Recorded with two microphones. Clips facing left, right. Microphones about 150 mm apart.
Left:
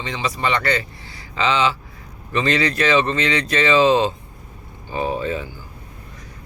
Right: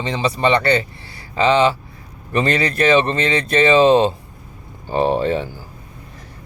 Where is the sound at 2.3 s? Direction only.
55° right (ahead or behind).